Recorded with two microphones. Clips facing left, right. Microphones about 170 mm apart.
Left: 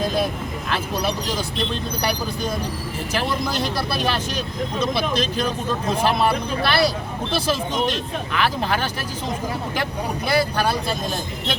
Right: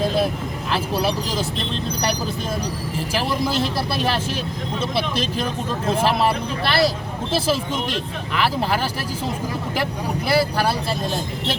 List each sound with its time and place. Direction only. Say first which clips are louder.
3.2 s speech: right 4 dB; 30° right (ahead or behind)
3.9 s speech: right 1 dB; centre (ahead or behind)
8.4 s speech: right 1 dB; 5° right (ahead or behind)
10.2 s speech: right 1 dB; 5° right (ahead or behind)